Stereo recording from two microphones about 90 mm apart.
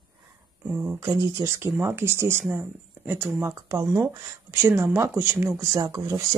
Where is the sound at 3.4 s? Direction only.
35° right (ahead or behind).